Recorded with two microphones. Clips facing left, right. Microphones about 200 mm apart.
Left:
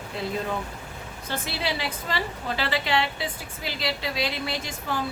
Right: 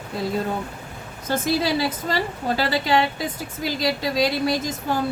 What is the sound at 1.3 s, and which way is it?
A woman's voice, 40° right (ahead or behind).